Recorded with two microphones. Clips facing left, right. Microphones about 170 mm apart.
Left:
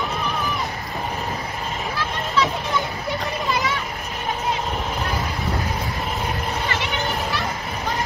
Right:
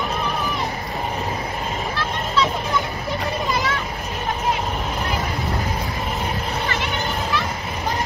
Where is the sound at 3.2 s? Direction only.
Centre (ahead or behind).